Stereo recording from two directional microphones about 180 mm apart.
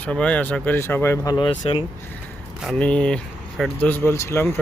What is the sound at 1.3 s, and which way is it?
Speech, 25° left (ahead or behind).